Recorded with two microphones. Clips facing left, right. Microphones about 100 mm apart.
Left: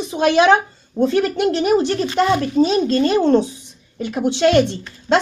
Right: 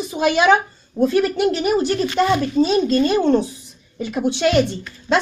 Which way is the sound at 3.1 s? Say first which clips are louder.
Left 2 dB; 20° left (ahead or behind).